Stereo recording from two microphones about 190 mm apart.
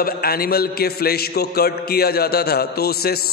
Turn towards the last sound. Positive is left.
turn(degrees=55)  # may be behind; listen again after turning